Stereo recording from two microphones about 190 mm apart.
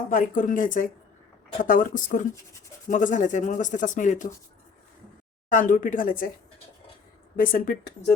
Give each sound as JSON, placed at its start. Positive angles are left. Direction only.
{"t": 0.1, "sound": "speech", "side_deg": 40}
{"t": 5.5, "sound": "speech", "side_deg": 45}
{"t": 7.3, "sound": "speech", "side_deg": 45}